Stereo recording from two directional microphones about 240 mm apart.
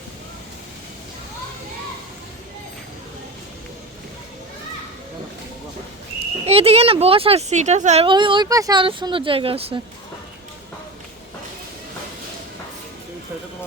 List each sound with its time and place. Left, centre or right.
6.4 s speech: right